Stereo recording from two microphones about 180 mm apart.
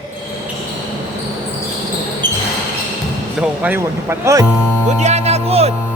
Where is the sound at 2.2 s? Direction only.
25° right (ahead or behind).